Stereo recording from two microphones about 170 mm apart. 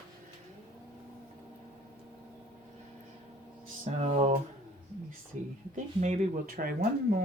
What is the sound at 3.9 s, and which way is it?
Speech, 40° right (ahead or behind).